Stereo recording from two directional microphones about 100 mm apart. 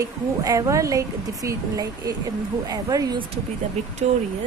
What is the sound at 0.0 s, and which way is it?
A woman's voice, 35° right (ahead or behind).